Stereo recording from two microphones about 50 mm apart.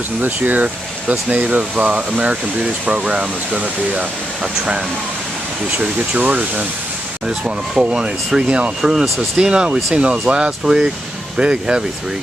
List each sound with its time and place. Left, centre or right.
0.2 s speech: right
5.8 s speech: right
7.2 s speech: centre